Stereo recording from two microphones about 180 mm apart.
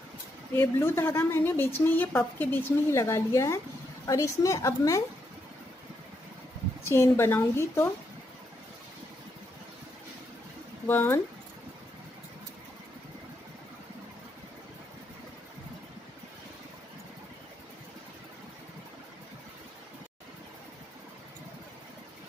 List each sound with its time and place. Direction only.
0.6 s a woman's voice: 15° left (ahead or behind)
6.8 s a woman's voice: 15° left (ahead or behind)
10.9 s a woman's voice: 15° left (ahead or behind)